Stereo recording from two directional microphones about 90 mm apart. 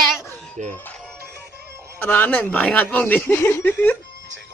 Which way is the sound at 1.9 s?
20° left (ahead or behind).